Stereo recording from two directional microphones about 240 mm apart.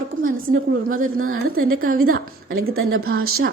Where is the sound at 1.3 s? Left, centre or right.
Right.